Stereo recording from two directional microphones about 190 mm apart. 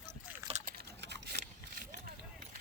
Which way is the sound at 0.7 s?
60° right (ahead or behind).